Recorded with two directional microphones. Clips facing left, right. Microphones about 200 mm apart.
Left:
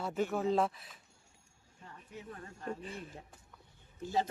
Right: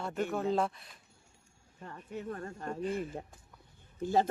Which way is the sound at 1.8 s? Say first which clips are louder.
Right 8 dB; 55° right (ahead or behind).